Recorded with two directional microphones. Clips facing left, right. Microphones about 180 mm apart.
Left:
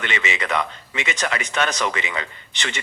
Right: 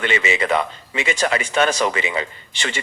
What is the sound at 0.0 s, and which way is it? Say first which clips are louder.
Speech: right 6 dB; 35° right (ahead or behind).